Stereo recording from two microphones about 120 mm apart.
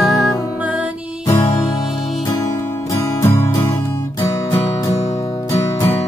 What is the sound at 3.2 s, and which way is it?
Music, 20° left (ahead or behind).